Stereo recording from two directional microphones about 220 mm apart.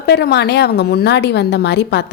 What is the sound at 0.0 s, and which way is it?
A woman's voice, 50° left (ahead or behind).